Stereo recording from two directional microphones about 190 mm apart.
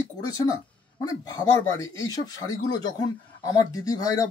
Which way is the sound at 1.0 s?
15° left (ahead or behind).